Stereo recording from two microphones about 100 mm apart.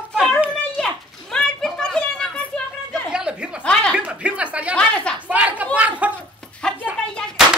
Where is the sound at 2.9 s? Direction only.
10° right (ahead or behind).